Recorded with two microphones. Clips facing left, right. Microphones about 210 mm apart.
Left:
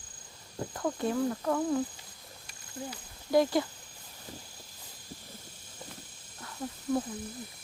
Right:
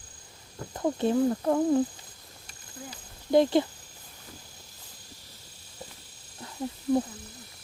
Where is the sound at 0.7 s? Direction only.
25° right (ahead or behind).